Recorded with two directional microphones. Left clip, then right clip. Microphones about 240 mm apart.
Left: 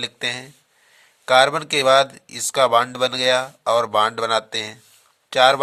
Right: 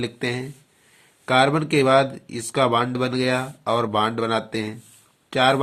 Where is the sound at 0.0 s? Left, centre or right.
Left.